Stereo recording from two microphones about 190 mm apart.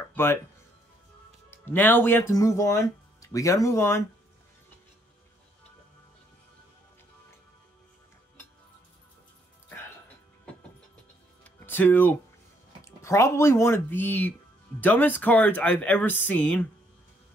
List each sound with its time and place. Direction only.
0.0 s music: 10° left (ahead or behind)
1.5 s speech: 10° left (ahead or behind)
11.4 s music: 10° left (ahead or behind)
12.8 s speech: 15° left (ahead or behind)